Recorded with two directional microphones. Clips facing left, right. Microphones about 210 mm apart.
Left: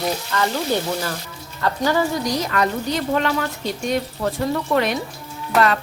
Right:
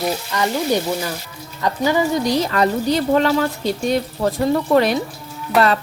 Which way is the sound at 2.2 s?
30° right (ahead or behind).